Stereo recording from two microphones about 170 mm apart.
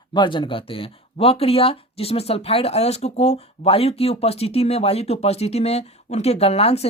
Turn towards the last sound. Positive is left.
turn(degrees=35)  # may be behind; listen again after turning